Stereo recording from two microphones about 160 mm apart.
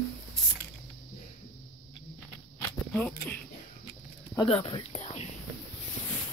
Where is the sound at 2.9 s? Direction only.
5° left (ahead or behind).